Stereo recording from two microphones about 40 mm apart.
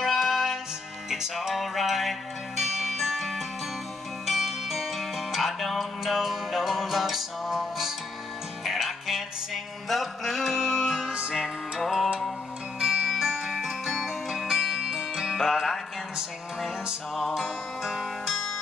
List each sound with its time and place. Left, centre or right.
0.0 s music: centre
11.1 s music: right
11.3 s music: centre
12.8 s music: centre
14.3 s music: centre
15.3 s music: centre
16.2 s music: centre